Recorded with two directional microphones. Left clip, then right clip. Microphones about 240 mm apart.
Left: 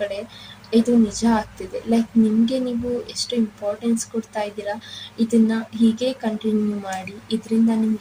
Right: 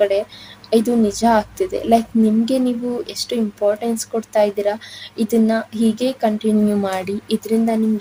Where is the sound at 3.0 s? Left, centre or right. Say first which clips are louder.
Right 2 dB; right.